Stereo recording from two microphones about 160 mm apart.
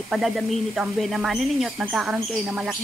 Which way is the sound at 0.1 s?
Centre (ahead or behind).